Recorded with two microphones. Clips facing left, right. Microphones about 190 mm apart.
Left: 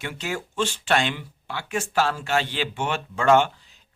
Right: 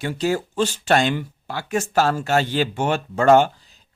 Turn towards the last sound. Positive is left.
turn(degrees=-40)  # may be behind; listen again after turning